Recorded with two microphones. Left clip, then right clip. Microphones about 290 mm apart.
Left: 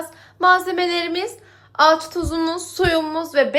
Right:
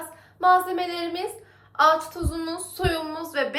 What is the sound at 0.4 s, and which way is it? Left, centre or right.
A woman's voice, left.